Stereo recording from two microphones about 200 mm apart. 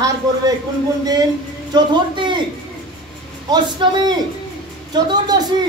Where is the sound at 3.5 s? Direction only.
20° right (ahead or behind).